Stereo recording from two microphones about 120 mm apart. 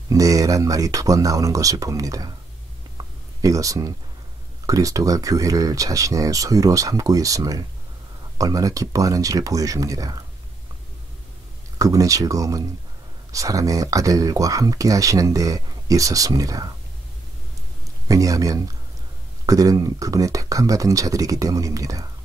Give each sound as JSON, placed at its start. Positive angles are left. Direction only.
{"t": 0.1, "sound": "speech", "side_deg": -30}
{"t": 3.4, "sound": "speech", "side_deg": -30}
{"t": 11.8, "sound": "speech", "side_deg": -30}
{"t": 18.0, "sound": "speech", "side_deg": -30}